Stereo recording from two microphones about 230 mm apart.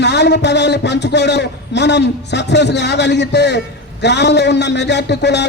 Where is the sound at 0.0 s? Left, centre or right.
Left.